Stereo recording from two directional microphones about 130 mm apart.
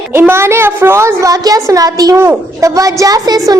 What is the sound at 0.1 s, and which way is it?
A child's voice, 20° right (ahead or behind).